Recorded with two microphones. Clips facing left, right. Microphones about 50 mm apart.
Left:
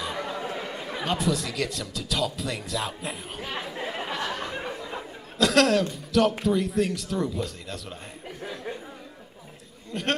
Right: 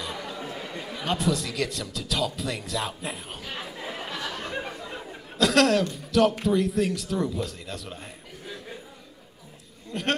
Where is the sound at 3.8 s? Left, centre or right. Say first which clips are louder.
Left 2 dB; centre.